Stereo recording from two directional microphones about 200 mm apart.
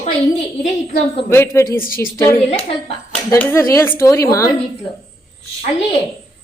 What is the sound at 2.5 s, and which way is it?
Speech, 30° left (ahead or behind).